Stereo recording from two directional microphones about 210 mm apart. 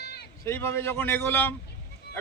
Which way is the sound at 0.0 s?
50° left (ahead or behind).